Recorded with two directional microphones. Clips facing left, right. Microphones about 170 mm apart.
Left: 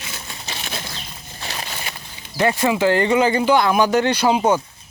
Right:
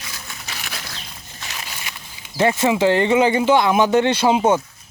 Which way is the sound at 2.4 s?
20° right (ahead or behind).